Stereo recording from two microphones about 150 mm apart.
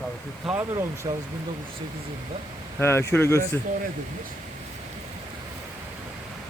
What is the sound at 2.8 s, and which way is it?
Speech, 15° left (ahead or behind).